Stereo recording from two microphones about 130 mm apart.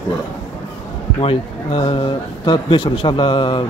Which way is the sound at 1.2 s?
45° left (ahead or behind).